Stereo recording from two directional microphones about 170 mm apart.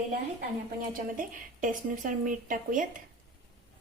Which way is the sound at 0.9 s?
50° right (ahead or behind).